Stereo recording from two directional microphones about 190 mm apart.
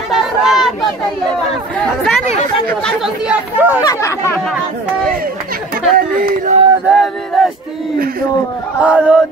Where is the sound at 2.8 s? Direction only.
5° right (ahead or behind).